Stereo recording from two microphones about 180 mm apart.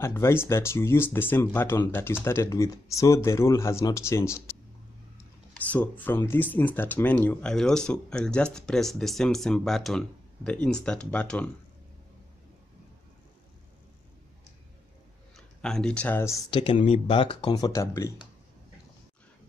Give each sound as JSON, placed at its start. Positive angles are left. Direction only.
{"t": 0.0, "sound": "speech", "side_deg": 15}
{"t": 5.7, "sound": "speech", "side_deg": 10}
{"t": 15.3, "sound": "a man's voice", "side_deg": 5}
{"t": 16.4, "sound": "speech", "side_deg": 30}